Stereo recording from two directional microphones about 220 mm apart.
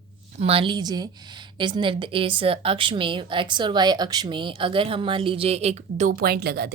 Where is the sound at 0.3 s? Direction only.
25° right (ahead or behind).